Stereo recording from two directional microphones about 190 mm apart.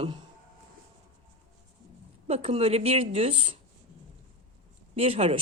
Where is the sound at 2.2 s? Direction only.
30° right (ahead or behind).